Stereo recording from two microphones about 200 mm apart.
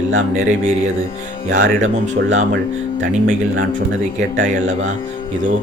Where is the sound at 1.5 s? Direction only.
40° right (ahead or behind).